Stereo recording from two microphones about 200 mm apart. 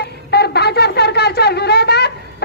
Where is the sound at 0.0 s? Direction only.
55° left (ahead or behind).